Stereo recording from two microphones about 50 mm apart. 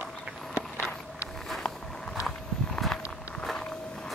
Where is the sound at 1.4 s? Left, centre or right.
Centre.